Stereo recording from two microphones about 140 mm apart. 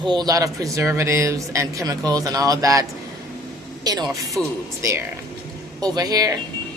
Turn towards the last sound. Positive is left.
turn(degrees=-25)  # may be behind; listen again after turning